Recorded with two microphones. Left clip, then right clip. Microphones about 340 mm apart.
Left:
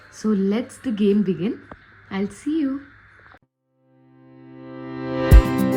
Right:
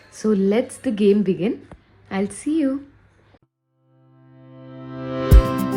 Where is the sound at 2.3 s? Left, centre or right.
Left.